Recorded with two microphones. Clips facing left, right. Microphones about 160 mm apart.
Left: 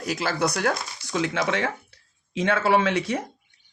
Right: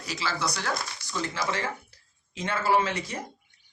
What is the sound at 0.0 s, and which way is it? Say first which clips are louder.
Speech: left 6 dB; 55° left (ahead or behind).